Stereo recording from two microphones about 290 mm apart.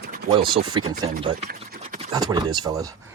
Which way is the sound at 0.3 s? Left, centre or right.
Centre.